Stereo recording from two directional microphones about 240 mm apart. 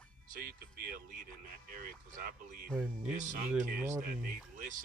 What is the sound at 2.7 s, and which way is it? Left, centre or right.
Speech, centre.